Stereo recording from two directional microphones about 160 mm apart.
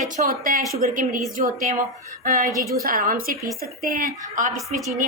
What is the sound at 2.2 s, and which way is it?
Speech, 50° right (ahead or behind).